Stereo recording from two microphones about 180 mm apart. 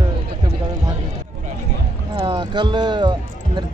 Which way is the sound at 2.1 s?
25° right (ahead or behind).